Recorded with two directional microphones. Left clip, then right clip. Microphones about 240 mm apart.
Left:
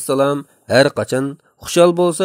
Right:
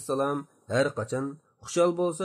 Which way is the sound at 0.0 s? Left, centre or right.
Left.